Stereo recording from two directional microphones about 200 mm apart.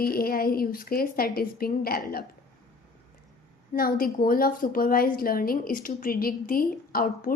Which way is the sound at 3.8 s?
45° left (ahead or behind).